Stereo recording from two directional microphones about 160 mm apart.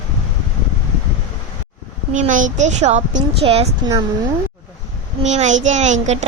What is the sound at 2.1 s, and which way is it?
A woman's voice, 55° right (ahead or behind).